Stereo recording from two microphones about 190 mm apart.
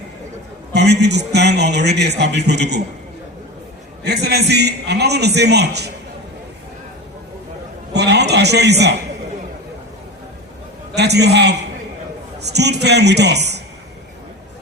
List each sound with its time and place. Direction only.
0.7 s a man's voice: 60° right (ahead or behind)
4.0 s a man's voice: 60° right (ahead or behind)
7.9 s a man's voice: 60° right (ahead or behind)
10.9 s a man's voice: 60° right (ahead or behind)